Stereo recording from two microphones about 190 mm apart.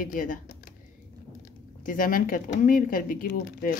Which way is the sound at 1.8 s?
45° left (ahead or behind).